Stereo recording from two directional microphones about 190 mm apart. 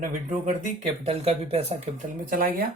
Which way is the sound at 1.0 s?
35° right (ahead or behind).